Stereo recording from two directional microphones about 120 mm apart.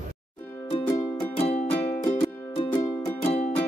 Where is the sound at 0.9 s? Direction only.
20° left (ahead or behind).